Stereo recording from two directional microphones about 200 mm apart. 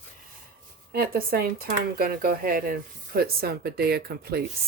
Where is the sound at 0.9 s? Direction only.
50° right (ahead or behind).